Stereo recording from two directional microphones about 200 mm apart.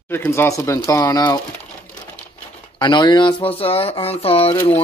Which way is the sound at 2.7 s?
25° left (ahead or behind).